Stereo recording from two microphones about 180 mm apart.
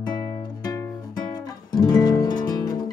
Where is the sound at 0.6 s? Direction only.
20° left (ahead or behind).